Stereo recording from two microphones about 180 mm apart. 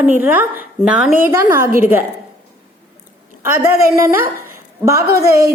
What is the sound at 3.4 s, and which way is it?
A woman's voice, 15° right (ahead or behind).